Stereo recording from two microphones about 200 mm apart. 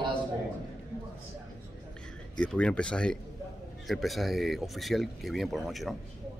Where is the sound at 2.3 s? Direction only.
5° left (ahead or behind).